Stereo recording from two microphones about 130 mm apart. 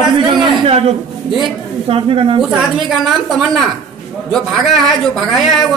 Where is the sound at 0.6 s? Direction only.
50° right (ahead or behind).